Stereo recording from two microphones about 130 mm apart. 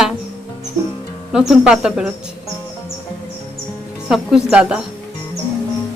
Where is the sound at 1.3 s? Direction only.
5° right (ahead or behind).